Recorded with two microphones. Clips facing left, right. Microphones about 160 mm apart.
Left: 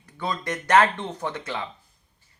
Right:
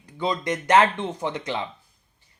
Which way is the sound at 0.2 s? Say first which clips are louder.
Right 4 dB; 15° right (ahead or behind).